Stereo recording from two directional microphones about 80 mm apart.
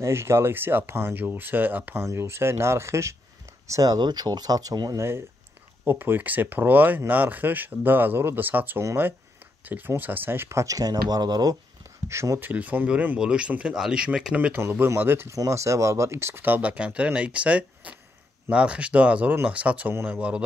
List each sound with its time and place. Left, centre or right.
0.0 s speech: right
2.0 s speech: right
5.9 s speech: right
12.1 s speech: right
12.4 s speech: right
15.3 s speech: right; by 19.9 s centre
19.9 s speech: right
20.2 s speech: centre